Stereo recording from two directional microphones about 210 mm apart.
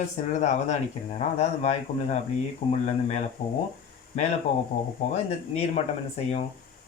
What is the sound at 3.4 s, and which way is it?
Speech, 40° left (ahead or behind).